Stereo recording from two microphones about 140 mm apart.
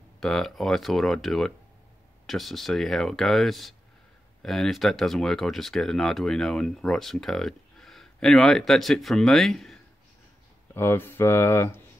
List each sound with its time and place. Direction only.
0.2 s speech: centre (ahead or behind)
10.7 s speech: 15° left (ahead or behind)